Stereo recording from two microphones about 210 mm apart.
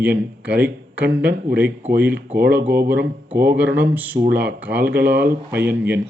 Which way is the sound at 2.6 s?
50° right (ahead or behind).